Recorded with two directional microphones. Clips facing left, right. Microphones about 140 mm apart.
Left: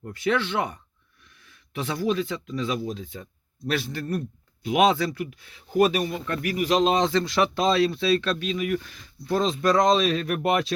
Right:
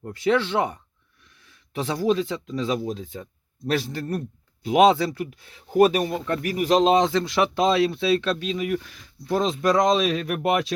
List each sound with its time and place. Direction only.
0.0 s speech: 30° right (ahead or behind)
6.8 s speech: 15° right (ahead or behind)
8.8 s speech: 5° right (ahead or behind)